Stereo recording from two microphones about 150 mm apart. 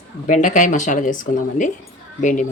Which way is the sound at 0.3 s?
55° left (ahead or behind).